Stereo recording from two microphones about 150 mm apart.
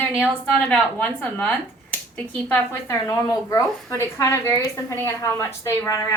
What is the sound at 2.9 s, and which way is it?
A woman's voice, 25° left (ahead or behind).